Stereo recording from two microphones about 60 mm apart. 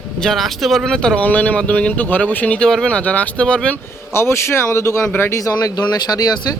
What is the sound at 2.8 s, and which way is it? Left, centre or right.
Speech, left.